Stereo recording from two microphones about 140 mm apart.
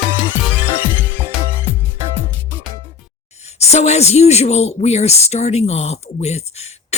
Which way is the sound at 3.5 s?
50° left (ahead or behind).